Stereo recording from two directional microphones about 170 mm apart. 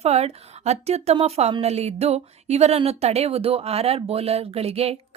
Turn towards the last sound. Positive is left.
turn(degrees=-35)  # may be behind; listen again after turning